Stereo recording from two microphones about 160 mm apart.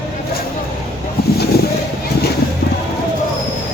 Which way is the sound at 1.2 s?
75° left (ahead or behind).